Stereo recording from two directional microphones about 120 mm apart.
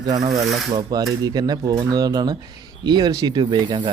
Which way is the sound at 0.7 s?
35° right (ahead or behind).